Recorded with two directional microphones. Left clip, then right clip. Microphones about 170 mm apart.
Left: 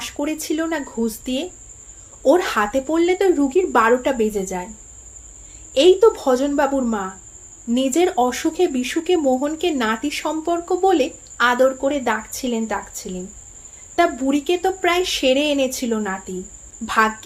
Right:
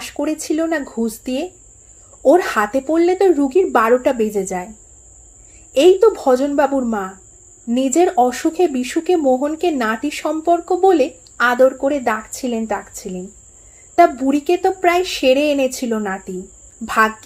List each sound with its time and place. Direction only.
0.0 s speech: 35° right (ahead or behind)
5.7 s speech: 35° right (ahead or behind)